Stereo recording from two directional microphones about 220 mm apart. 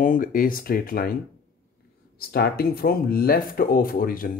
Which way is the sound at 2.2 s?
45° left (ahead or behind).